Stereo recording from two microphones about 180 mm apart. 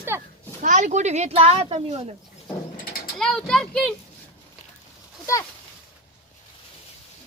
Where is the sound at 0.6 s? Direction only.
45° right (ahead or behind).